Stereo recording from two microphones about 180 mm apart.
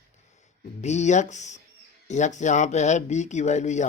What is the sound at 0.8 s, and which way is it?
A man's voice, 40° left (ahead or behind).